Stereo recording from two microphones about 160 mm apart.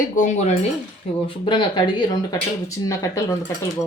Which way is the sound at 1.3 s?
30° left (ahead or behind).